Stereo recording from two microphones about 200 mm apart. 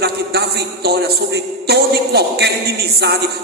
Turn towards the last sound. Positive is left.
turn(degrees=-55)  # may be behind; listen again after turning